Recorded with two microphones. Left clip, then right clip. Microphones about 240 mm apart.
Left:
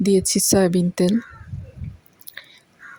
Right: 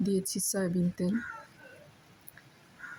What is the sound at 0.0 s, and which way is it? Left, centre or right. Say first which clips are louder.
Speech: left 14 dB; left.